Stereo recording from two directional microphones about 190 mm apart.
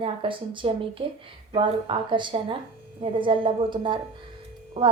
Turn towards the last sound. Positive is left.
turn(degrees=-25)  # may be behind; listen again after turning